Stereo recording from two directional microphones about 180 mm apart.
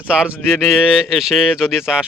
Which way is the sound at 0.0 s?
5° right (ahead or behind).